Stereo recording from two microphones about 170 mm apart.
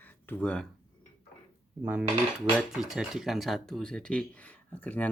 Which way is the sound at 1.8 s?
10° right (ahead or behind).